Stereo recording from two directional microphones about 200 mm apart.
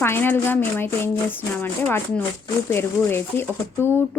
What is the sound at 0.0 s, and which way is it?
Speech, 10° left (ahead or behind).